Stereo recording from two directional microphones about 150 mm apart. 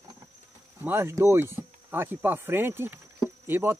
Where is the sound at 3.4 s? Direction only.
15° right (ahead or behind).